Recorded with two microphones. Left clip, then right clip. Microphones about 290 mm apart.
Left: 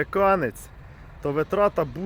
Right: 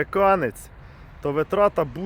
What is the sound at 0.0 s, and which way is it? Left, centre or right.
Speech, centre.